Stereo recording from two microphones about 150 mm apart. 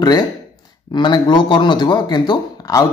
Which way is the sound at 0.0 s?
25° left (ahead or behind).